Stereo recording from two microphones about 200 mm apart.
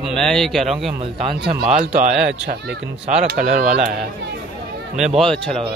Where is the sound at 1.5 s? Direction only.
5° right (ahead or behind).